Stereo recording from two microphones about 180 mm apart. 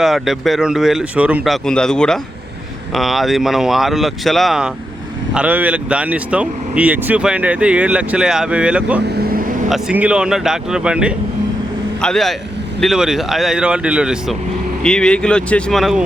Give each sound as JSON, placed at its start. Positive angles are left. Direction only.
{"t": 0.0, "sound": "speech", "side_deg": 0}
{"t": 9.0, "sound": "vehicle", "side_deg": -60}
{"t": 9.6, "sound": "speech", "side_deg": 0}